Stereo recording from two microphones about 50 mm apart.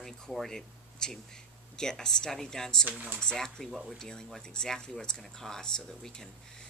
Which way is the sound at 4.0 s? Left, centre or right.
Centre.